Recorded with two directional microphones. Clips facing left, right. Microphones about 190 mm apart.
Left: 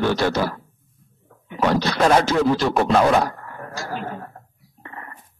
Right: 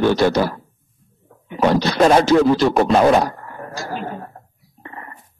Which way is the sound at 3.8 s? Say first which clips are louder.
Right 2 dB; 20° right (ahead or behind).